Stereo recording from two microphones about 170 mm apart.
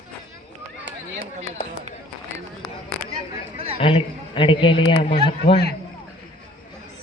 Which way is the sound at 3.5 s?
35° right (ahead or behind).